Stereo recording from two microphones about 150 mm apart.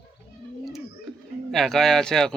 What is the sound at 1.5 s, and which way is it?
Speech, centre (ahead or behind).